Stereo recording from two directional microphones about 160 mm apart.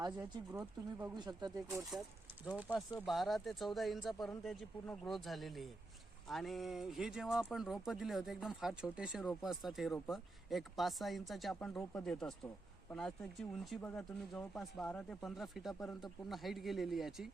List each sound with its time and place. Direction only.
0.2 s speech: 15° right (ahead or behind)
1.1 s speech: 25° right (ahead or behind)
1.7 s speech: centre (ahead or behind)